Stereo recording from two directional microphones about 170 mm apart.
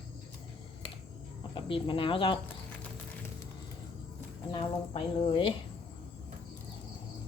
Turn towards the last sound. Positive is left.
turn(degrees=30)  # may be behind; listen again after turning